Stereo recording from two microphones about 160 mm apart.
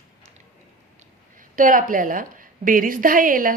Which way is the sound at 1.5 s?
55° right (ahead or behind).